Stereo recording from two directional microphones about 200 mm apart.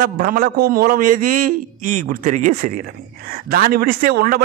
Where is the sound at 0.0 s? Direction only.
45° right (ahead or behind).